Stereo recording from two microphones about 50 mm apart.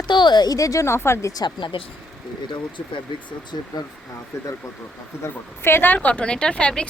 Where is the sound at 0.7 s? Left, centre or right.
Left.